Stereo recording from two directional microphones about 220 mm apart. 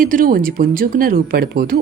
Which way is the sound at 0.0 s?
40° right (ahead or behind).